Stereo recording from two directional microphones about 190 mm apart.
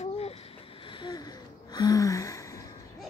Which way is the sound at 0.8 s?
25° left (ahead or behind).